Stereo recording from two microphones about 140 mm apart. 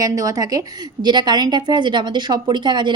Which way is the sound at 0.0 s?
25° right (ahead or behind).